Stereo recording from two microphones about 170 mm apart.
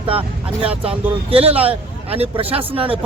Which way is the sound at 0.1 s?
35° right (ahead or behind).